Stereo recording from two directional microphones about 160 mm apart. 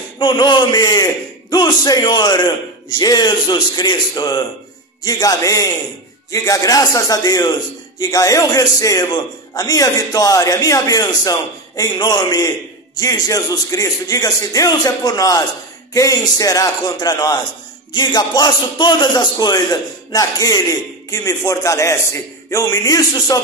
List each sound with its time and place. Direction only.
0.2 s a man's voice: 30° left (ahead or behind)